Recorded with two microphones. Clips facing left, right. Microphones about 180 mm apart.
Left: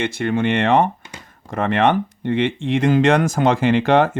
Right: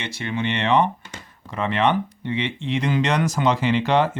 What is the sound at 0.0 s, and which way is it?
Speech, 50° left (ahead or behind).